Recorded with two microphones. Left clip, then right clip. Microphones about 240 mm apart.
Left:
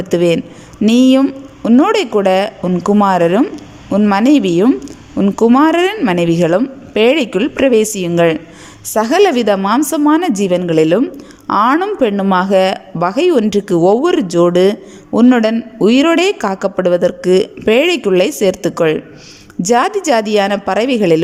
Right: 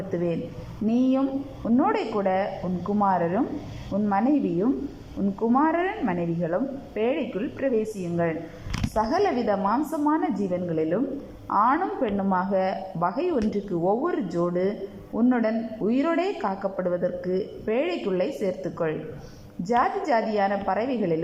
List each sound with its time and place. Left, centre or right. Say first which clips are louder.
0.1 s a woman's voice: left 16 dB; left